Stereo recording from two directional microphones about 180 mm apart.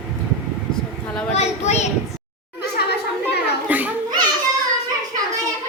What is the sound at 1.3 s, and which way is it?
Speech, 35° left (ahead or behind).